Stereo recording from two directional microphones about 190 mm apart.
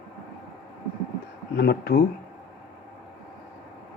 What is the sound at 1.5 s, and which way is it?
Speech, 60° left (ahead or behind).